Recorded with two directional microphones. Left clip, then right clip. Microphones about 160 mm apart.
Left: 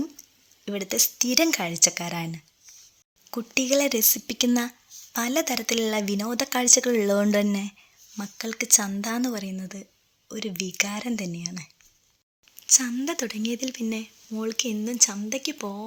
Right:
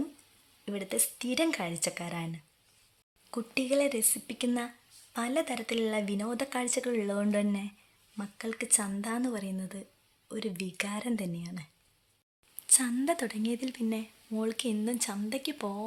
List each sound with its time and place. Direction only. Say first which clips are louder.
0.6 s speech: left 9 dB; 25° left (ahead or behind)